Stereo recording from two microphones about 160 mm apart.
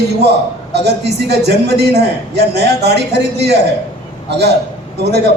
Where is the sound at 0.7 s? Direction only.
90° right.